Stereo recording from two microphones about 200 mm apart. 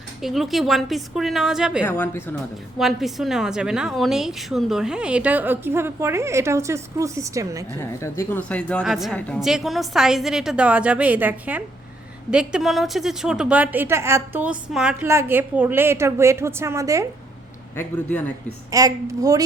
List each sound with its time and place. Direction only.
0.2 s a woman's voice: centre (ahead or behind)
1.8 s speech: 10° left (ahead or behind)
2.7 s a woman's voice: centre (ahead or behind)
7.7 s a woman's voice: 10° left (ahead or behind); by 17.1 s 15° right (ahead or behind)
17.7 s speech: 10° left (ahead or behind)
18.4 s a woman's voice: 15° right (ahead or behind)